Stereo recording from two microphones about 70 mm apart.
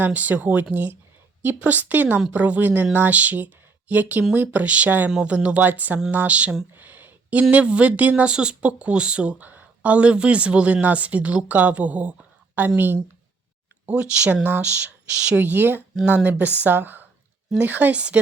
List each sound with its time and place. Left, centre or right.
0.0 s speech: right
6.7 s a sound: right
7.5 s speech: centre
13.8 s speech: centre
15.4 s speech: right